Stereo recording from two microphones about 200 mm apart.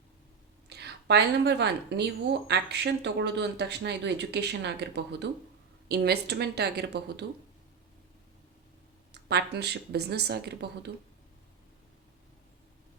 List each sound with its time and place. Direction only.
0.7 s a woman's voice: 55° right (ahead or behind)
9.3 s a woman's voice: 55° right (ahead or behind)